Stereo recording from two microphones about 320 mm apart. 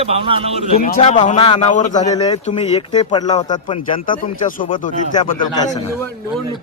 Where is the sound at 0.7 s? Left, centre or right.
Left.